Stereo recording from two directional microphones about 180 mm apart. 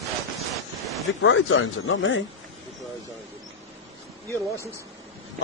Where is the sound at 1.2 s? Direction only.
90° left.